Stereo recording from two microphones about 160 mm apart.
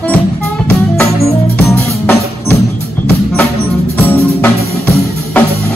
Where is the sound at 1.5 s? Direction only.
10° left (ahead or behind).